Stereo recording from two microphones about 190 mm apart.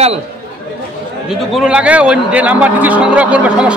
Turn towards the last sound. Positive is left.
turn(degrees=-5)  # may be behind; listen again after turning